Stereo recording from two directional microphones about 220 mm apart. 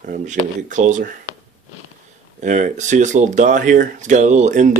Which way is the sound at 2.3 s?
35° right (ahead or behind).